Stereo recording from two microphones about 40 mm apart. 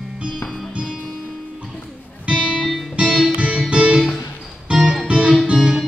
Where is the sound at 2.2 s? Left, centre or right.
Right.